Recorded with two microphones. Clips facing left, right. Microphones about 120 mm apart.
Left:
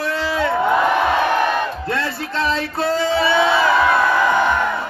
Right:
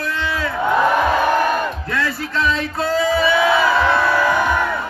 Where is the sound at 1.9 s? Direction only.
30° left (ahead or behind).